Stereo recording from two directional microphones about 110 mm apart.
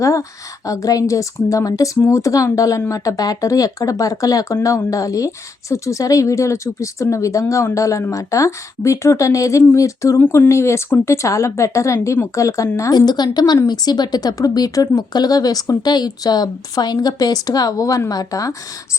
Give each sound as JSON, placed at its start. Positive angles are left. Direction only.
{"t": 0.0, "sound": "speech", "side_deg": 30}
{"t": 12.9, "sound": "speech", "side_deg": 40}